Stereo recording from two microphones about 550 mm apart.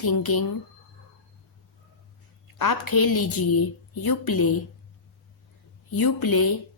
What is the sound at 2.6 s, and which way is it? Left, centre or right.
A woman's voice, left.